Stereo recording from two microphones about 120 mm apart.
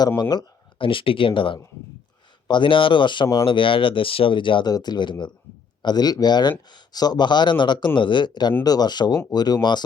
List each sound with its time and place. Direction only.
0.2 s speech: 40° left (ahead or behind)